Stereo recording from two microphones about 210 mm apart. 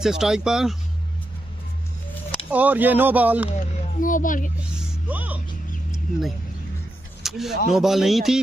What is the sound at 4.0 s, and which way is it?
Speech, 40° left (ahead or behind).